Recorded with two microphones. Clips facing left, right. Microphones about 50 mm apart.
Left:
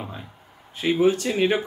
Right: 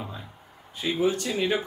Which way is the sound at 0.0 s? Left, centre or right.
Left.